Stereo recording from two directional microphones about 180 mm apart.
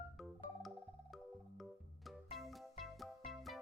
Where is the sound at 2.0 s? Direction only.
Centre (ahead or behind).